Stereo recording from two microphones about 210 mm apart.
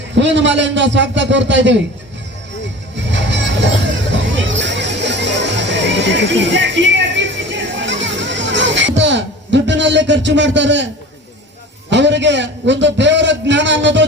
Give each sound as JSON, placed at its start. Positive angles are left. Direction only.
{"t": 0.2, "sound": "a man's voice", "side_deg": -60}
{"t": 3.1, "sound": "vehicle", "side_deg": -60}
{"t": 4.1, "sound": "music", "side_deg": -60}
{"t": 9.0, "sound": "speech", "side_deg": -55}
{"t": 11.9, "sound": "a man's voice", "side_deg": -55}